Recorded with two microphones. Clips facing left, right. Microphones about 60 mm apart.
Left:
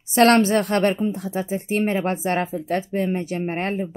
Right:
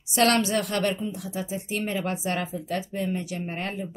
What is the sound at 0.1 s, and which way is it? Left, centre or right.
Speech, left.